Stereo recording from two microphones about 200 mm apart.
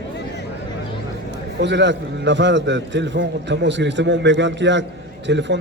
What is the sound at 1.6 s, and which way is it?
A man's voice, 60° right (ahead or behind).